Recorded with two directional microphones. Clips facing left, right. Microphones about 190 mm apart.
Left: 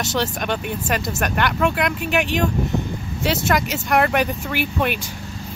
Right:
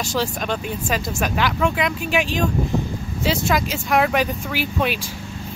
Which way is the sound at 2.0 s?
65° left (ahead or behind).